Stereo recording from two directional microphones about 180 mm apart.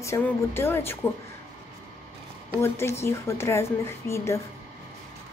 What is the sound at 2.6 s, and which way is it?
A woman's voice, 15° left (ahead or behind).